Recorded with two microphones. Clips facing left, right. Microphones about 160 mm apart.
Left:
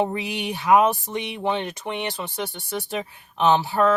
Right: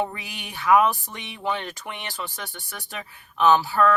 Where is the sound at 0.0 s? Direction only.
25° left (ahead or behind).